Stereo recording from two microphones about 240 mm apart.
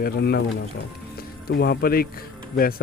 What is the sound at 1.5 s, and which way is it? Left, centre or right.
Speech, left.